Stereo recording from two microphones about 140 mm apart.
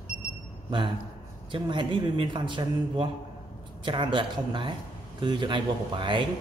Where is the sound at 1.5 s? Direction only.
35° right (ahead or behind).